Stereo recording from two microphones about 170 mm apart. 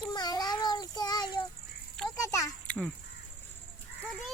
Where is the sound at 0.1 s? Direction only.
25° left (ahead or behind).